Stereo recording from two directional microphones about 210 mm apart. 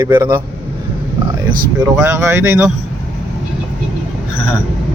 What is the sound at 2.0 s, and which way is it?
Speech, 15° right (ahead or behind).